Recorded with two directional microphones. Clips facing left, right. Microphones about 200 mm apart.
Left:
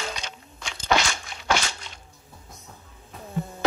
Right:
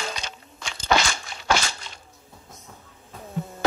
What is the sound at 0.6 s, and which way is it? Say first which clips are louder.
Crunch: right 1 dB; 35° right (ahead or behind).